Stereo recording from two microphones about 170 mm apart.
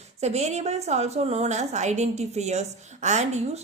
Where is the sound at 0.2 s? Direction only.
40° right (ahead or behind).